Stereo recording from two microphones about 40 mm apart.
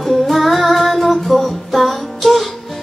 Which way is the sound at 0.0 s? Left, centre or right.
Centre.